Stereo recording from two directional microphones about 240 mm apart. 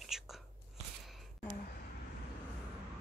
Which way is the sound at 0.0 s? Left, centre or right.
Centre.